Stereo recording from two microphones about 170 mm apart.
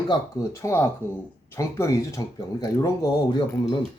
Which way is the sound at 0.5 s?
15° left (ahead or behind).